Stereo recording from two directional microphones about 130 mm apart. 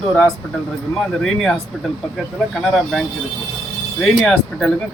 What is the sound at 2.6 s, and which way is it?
Speech, 5° left (ahead or behind).